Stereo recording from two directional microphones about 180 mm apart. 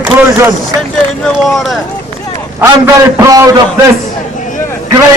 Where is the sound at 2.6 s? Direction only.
15° right (ahead or behind).